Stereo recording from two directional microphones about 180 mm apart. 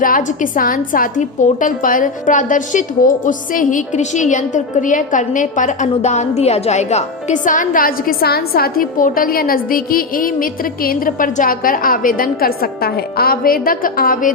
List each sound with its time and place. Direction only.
0.0 s a woman's voice: 50° left (ahead or behind)